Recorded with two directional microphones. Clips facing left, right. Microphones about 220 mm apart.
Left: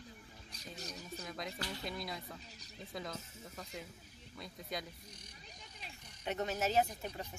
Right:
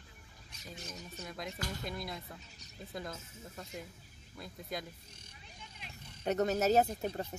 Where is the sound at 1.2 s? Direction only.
Centre (ahead or behind).